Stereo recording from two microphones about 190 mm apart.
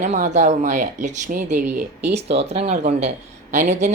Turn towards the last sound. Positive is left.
turn(degrees=-40)  # may be behind; listen again after turning